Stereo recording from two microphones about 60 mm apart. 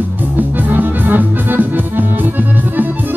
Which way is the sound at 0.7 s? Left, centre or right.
Right.